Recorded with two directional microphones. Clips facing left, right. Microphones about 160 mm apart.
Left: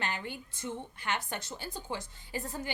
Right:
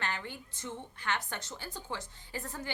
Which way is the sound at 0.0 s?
15° left (ahead or behind).